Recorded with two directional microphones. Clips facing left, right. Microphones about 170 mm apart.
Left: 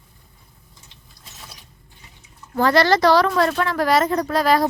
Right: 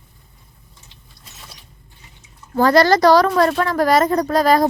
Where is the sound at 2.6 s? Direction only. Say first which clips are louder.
Right 3 dB; 40° right (ahead or behind).